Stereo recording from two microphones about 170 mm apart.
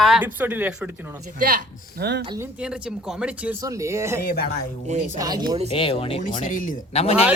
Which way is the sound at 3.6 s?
20° right (ahead or behind).